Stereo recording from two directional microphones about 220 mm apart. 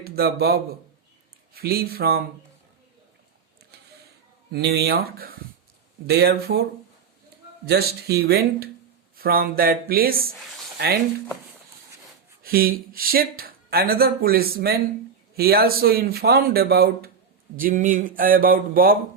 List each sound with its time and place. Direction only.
0.0 s speech: 45° right (ahead or behind)
4.5 s speech: 45° right (ahead or behind)
12.4 s speech: 40° right (ahead or behind)